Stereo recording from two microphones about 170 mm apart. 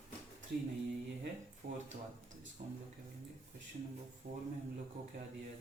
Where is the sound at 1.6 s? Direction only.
40° right (ahead or behind).